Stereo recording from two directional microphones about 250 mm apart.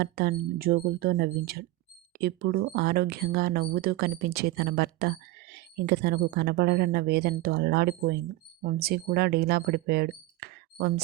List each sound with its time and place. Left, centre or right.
0.0 s speech: right